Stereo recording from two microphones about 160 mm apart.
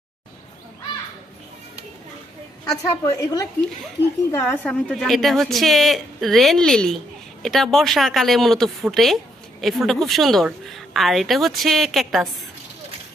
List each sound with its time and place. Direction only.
2.6 s a woman's voice: 20° left (ahead or behind); by 12.2 s centre (ahead or behind)